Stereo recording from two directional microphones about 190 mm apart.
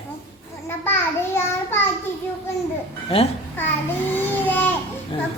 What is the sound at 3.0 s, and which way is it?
Speech, 30° left (ahead or behind).